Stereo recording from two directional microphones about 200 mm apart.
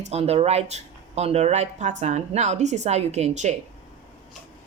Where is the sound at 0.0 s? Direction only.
30° right (ahead or behind).